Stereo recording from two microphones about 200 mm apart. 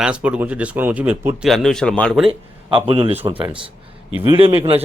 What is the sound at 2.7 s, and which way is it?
Speech, 25° right (ahead or behind).